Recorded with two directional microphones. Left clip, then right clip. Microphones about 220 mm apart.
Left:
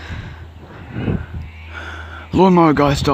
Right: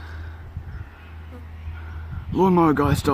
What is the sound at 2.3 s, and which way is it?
Speech, 20° left (ahead or behind).